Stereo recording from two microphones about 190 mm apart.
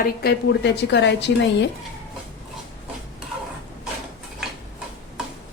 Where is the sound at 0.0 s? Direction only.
55° left (ahead or behind).